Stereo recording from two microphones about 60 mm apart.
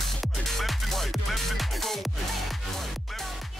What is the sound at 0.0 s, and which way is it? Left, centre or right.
Music, centre.